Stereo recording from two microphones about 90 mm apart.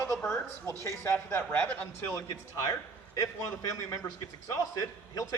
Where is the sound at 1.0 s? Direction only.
25° left (ahead or behind).